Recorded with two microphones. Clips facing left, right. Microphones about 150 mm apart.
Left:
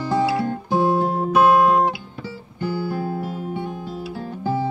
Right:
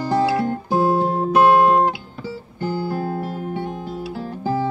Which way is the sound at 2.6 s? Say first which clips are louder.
Right 1 dB; 50° right (ahead or behind).